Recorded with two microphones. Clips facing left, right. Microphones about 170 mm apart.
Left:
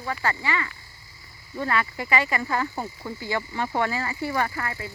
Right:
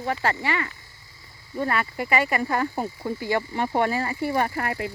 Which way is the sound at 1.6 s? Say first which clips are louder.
Right 1 dB; 30° right (ahead or behind).